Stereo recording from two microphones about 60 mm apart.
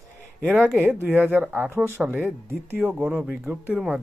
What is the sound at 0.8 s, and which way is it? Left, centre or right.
Speech, right.